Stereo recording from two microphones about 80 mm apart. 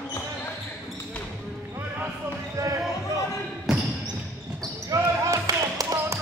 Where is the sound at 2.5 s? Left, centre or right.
Right.